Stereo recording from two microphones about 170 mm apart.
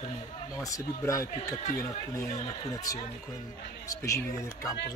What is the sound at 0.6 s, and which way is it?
Speech, 20° left (ahead or behind).